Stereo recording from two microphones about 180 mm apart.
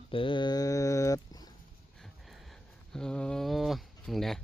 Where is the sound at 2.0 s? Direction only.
Centre (ahead or behind).